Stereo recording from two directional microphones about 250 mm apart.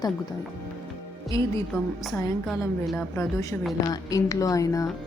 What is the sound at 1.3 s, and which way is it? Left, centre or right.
Speech, centre.